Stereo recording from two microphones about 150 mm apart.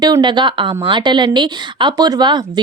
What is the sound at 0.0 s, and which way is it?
A woman's voice, 30° right (ahead or behind).